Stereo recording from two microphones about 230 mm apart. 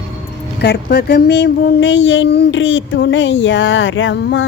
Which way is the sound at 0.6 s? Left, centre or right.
Left.